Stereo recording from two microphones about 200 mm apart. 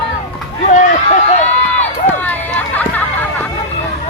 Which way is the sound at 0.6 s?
40° left (ahead or behind).